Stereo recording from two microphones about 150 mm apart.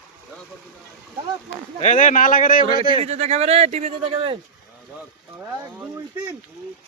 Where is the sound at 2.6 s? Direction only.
40° right (ahead or behind).